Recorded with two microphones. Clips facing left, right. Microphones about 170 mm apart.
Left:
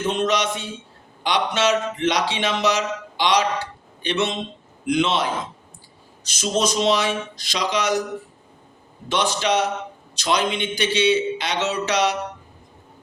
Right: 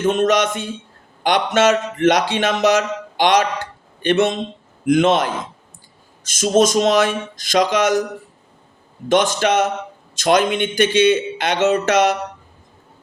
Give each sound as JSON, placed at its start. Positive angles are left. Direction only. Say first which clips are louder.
{"t": 0.1, "sound": "speech", "louder": "right 5 dB", "side_deg": -50}
{"t": 9.0, "sound": "speech", "louder": "right 6 dB", "side_deg": -50}